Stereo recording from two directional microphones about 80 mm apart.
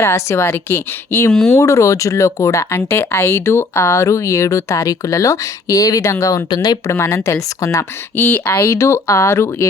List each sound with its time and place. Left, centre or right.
0.0 s speech: left
1.3 s speech: centre
1.5 s speech: left
6.5 s speech: left
6.9 s speech: left
8.1 s speech: left
8.6 s speech: left